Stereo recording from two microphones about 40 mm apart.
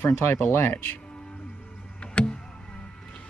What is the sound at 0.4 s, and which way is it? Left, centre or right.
Speech, left.